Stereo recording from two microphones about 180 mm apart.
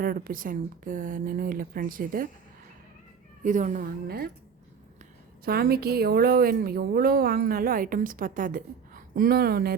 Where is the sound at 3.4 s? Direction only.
45° right (ahead or behind).